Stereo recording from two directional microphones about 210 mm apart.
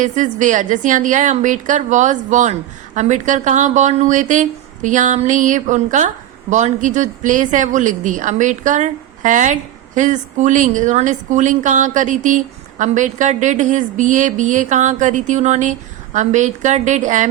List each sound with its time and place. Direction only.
0.0 s a woman's voice: 35° right (ahead or behind)